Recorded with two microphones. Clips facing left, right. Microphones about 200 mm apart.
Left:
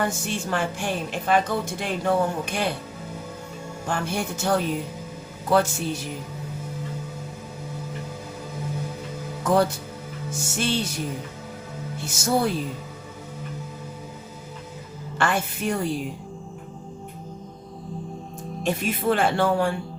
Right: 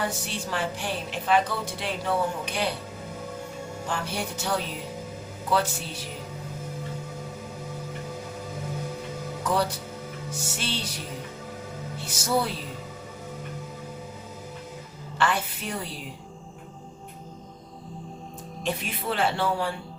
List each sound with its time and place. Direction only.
0.0 s a woman's voice: 50° left (ahead or behind)
3.8 s a woman's voice: 50° left (ahead or behind)
9.4 s a woman's voice: 45° left (ahead or behind)
12.0 s a woman's voice: 50° left (ahead or behind)
15.2 s a woman's voice: 50° left (ahead or behind)
18.6 s a woman's voice: 50° left (ahead or behind)